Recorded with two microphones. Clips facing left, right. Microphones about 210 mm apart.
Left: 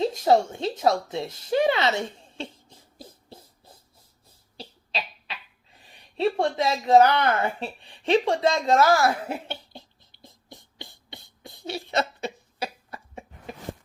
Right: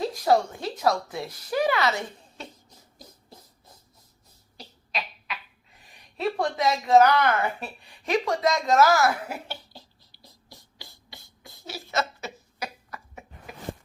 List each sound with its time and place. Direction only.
0.0 s a woman's voice: 25° left (ahead or behind)
4.5 s cough: 30° left (ahead or behind)
6.1 s speech: 30° left (ahead or behind)
11.6 s a sound: 25° left (ahead or behind)